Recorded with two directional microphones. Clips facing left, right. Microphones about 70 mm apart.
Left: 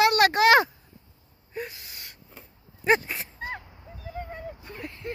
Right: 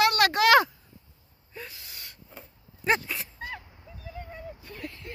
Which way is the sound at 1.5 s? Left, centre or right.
Centre.